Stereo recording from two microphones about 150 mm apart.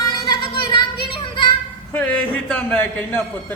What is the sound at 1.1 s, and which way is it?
Music, 35° left (ahead or behind).